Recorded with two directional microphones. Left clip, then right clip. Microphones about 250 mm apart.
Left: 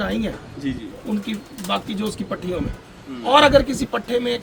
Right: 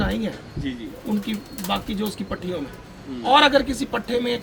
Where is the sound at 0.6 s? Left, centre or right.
Centre.